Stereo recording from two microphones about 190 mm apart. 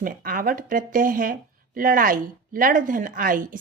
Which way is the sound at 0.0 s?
45° right (ahead or behind).